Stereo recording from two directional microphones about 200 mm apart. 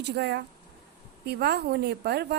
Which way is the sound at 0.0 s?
55° right (ahead or behind).